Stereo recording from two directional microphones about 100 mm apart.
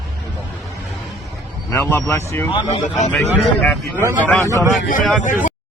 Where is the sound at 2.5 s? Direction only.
55° left (ahead or behind).